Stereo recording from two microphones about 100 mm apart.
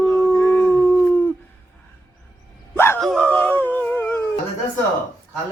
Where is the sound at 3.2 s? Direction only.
15° left (ahead or behind).